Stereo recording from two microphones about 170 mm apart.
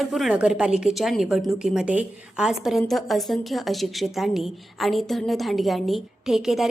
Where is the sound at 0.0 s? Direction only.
Centre (ahead or behind).